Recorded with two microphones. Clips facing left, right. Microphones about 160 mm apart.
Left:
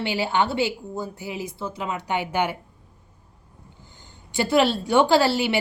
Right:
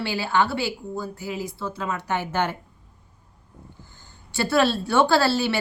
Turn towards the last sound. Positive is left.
turn(degrees=15)  # may be behind; listen again after turning